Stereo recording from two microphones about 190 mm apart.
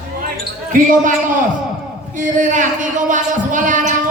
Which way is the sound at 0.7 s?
45° right (ahead or behind).